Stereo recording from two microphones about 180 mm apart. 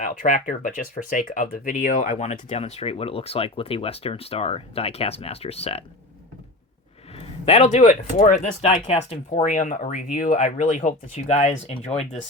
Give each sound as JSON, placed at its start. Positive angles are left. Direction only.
{"t": 0.0, "sound": "speech", "side_deg": 50}
{"t": 7.1, "sound": "speech", "side_deg": 35}